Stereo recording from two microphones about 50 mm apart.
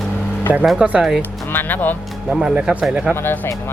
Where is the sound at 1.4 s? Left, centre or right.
Left.